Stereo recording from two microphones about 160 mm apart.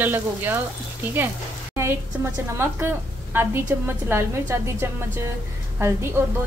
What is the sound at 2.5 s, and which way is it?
A woman's voice, 15° right (ahead or behind).